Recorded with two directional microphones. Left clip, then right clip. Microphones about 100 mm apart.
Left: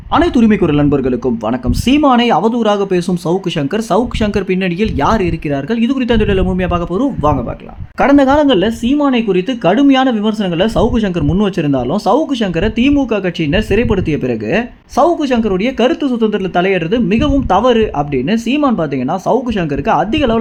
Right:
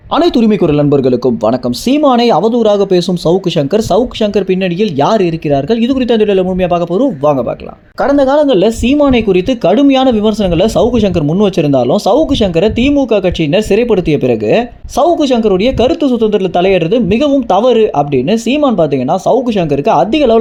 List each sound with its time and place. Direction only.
0.1 s speech: 25° right (ahead or behind)
8.0 s speech: 25° left (ahead or behind)
8.6 s speech: 25° right (ahead or behind)